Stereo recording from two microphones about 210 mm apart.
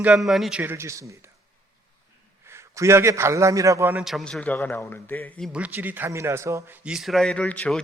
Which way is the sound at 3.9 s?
Centre (ahead or behind).